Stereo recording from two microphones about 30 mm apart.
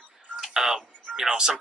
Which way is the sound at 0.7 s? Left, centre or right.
Centre.